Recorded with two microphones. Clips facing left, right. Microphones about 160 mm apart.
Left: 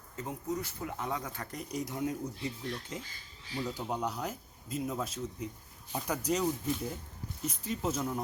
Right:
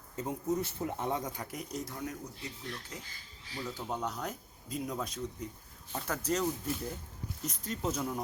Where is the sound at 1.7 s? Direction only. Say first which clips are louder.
Left 6 dB; 20° left (ahead or behind).